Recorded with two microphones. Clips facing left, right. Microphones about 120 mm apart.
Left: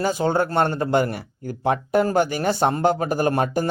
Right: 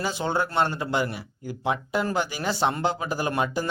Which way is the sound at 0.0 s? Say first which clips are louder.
Left 6 dB; 45° left (ahead or behind).